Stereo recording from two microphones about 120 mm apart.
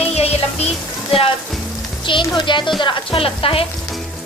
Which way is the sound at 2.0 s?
40° left (ahead or behind).